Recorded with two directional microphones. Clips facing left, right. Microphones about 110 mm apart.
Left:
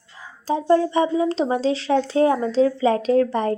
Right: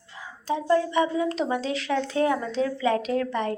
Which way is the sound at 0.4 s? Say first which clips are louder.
Left 5 dB; 35° left (ahead or behind).